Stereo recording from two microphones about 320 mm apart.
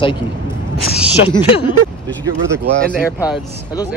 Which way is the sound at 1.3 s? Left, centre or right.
Centre.